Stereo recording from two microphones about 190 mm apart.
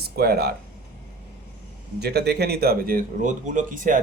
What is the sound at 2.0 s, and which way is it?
Speech, 60° right (ahead or behind).